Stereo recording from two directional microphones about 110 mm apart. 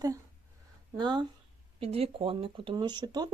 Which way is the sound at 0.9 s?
45° right (ahead or behind).